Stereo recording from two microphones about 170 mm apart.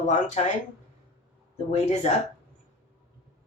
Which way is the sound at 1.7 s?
40° left (ahead or behind).